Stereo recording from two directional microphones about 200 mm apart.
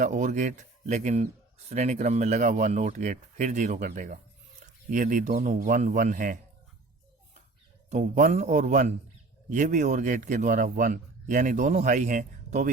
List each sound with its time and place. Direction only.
0.0 s a man's voice: 40° right (ahead or behind)
7.9 s a man's voice: 35° right (ahead or behind)